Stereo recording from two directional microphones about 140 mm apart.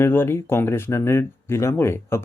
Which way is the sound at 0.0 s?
15° left (ahead or behind).